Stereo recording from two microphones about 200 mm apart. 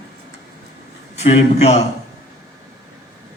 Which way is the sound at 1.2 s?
35° left (ahead or behind).